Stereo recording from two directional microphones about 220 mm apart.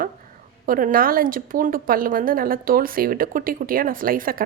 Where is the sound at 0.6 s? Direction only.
40° right (ahead or behind).